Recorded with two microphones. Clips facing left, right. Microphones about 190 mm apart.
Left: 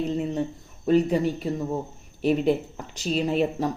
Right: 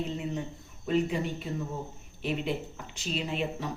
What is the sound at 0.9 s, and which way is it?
Speech, 40° left (ahead or behind).